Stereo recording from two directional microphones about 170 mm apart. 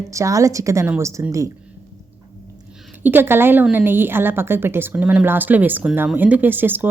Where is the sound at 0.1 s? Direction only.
20° right (ahead or behind).